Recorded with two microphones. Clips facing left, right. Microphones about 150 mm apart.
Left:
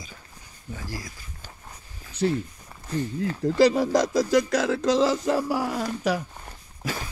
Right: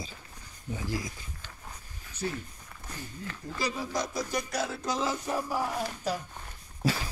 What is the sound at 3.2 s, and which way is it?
Speech, 90° left.